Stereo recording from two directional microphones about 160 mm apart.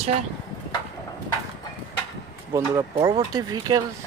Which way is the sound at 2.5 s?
20° right (ahead or behind).